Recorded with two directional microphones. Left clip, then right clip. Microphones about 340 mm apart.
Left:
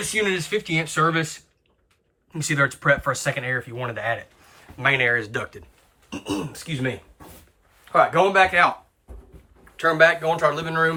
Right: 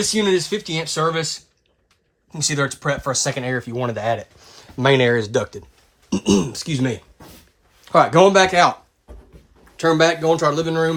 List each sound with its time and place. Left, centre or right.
0.1 s speech: centre
7.9 s speech: centre
9.7 s speech: centre